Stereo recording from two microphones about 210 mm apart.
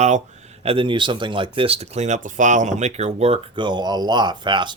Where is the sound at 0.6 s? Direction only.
25° right (ahead or behind).